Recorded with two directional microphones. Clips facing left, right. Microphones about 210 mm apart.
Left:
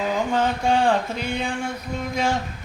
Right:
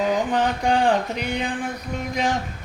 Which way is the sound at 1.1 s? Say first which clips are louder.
Right 1 dB; 15° right (ahead or behind).